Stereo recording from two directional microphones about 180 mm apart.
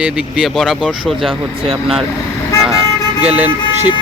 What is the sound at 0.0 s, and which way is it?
Speech, 5° right (ahead or behind).